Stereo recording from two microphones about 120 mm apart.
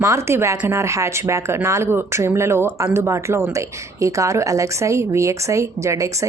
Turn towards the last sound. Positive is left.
turn(degrees=-25)  # may be behind; listen again after turning